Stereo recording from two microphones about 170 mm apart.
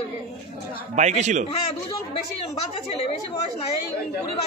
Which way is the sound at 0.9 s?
40° right (ahead or behind).